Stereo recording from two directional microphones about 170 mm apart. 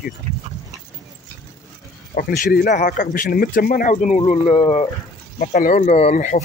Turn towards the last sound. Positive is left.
turn(degrees=45)  # may be behind; listen again after turning